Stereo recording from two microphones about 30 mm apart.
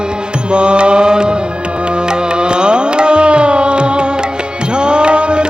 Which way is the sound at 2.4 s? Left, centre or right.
Right.